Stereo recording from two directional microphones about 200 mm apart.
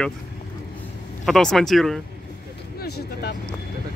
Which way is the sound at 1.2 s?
Centre (ahead or behind).